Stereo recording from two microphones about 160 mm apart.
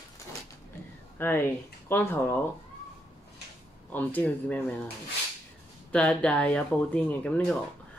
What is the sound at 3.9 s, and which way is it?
Speech, 10° left (ahead or behind).